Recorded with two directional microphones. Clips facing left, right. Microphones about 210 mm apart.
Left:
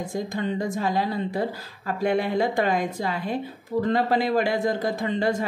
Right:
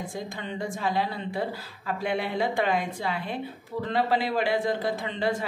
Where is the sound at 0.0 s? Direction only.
40° left (ahead or behind).